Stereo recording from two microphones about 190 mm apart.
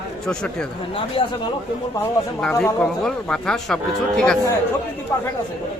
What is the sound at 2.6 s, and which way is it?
A man's voice, 5° left (ahead or behind).